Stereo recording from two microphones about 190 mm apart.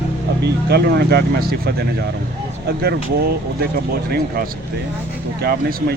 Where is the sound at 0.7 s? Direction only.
55° right (ahead or behind).